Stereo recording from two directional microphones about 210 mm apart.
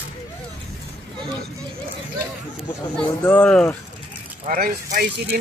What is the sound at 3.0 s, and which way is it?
Speech, 5° left (ahead or behind).